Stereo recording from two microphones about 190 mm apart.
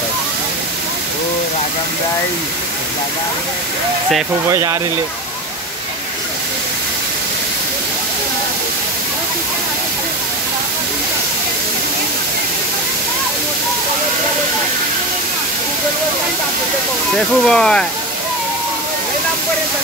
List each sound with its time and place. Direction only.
4.5 s speech: 15° right (ahead or behind)
17.5 s speech: 5° left (ahead or behind)